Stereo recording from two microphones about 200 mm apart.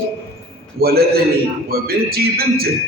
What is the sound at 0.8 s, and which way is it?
A man's voice, 50° right (ahead or behind).